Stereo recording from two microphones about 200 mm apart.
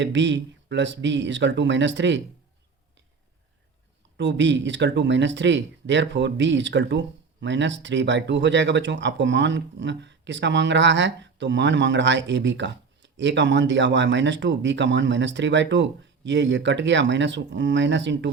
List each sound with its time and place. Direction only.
0.0 s speech: 60° right (ahead or behind)
4.2 s speech: 65° right (ahead or behind)